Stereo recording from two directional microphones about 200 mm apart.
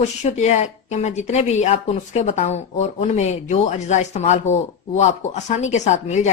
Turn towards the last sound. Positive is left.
turn(degrees=35)  # may be behind; listen again after turning